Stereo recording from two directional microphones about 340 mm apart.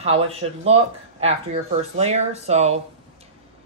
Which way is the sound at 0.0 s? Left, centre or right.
Centre.